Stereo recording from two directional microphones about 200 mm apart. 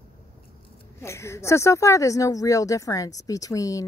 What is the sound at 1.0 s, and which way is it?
Speech, 15° left (ahead or behind).